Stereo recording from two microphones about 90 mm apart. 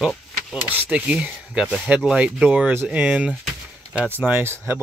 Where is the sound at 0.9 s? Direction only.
15° right (ahead or behind).